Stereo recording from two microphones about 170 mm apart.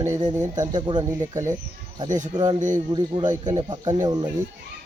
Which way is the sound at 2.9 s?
25° right (ahead or behind).